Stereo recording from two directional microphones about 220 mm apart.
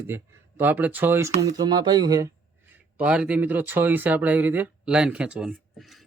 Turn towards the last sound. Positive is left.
turn(degrees=0)  # may be behind; listen again after turning